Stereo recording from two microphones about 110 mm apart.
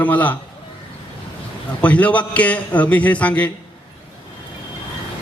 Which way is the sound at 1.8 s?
10° left (ahead or behind).